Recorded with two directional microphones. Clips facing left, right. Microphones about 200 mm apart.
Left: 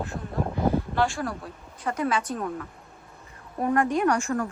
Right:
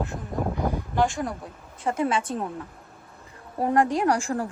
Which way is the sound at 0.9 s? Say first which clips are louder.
Right 1 dB; 15° right (ahead or behind).